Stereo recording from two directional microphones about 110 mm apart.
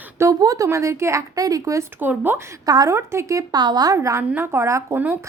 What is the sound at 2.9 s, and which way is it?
A woman's voice, 25° right (ahead or behind).